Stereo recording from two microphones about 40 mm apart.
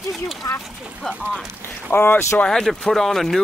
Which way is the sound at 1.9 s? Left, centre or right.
Left.